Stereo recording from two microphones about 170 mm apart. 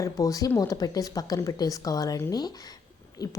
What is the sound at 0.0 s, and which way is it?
A woman's voice, 20° left (ahead or behind).